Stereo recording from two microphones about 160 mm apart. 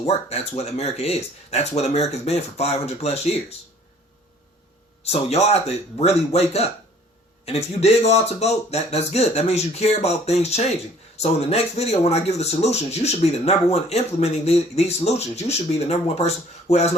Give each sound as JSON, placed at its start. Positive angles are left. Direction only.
{"t": 0.0, "sound": "speech", "side_deg": 40}
{"t": 5.0, "sound": "speech", "side_deg": 40}